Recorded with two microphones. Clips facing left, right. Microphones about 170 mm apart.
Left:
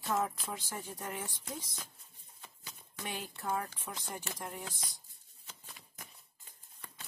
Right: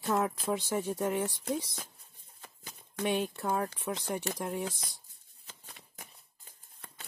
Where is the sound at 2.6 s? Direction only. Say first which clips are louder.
Right 12 dB; 65° right (ahead or behind).